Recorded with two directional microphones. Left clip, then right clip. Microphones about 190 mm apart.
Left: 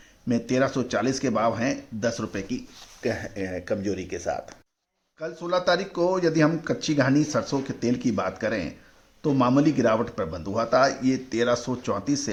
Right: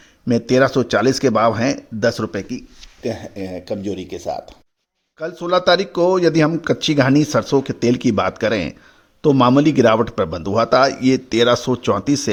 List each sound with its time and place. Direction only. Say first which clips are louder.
0.3 s speech: right 9 dB; 45° right (ahead or behind)
3.0 s speech: right 3 dB; 30° right (ahead or behind)
5.2 s speech: right 8 dB; 45° right (ahead or behind)